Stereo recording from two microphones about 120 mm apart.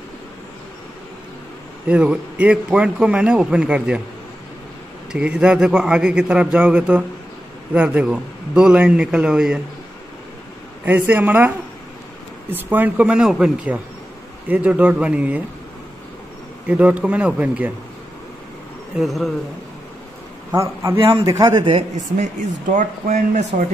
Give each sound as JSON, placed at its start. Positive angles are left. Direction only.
{"t": 1.9, "sound": "a man's voice", "side_deg": -10}
{"t": 5.1, "sound": "a man's voice", "side_deg": -10}
{"t": 10.9, "sound": "a man's voice", "side_deg": -15}
{"t": 16.6, "sound": "a man's voice", "side_deg": -10}
{"t": 18.9, "sound": "speech", "side_deg": 0}
{"t": 20.5, "sound": "a man's voice", "side_deg": -25}
{"t": 21.0, "sound": "a man's voice", "side_deg": -45}
{"t": 21.3, "sound": "a man's voice", "side_deg": -30}
{"t": 21.9, "sound": "speech", "side_deg": -85}